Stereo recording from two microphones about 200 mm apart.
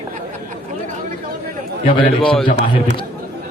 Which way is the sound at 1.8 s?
25° left (ahead or behind).